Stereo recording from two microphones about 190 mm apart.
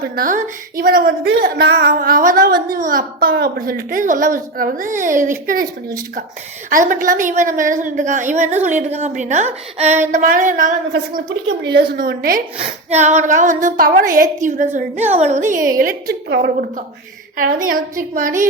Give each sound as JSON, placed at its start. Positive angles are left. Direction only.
{"t": 0.0, "sound": "a woman's voice", "side_deg": -45}
{"t": 6.7, "sound": "a woman's voice", "side_deg": -45}
{"t": 10.9, "sound": "a woman's voice", "side_deg": -65}
{"t": 12.5, "sound": "a woman's voice", "side_deg": -35}